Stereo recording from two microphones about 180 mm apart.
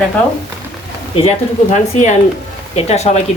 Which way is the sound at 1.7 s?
40° left (ahead or behind).